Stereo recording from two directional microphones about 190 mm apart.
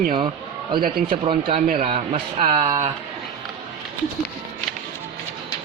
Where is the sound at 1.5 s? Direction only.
40° right (ahead or behind).